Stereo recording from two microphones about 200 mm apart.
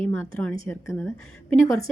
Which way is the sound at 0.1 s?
10° left (ahead or behind).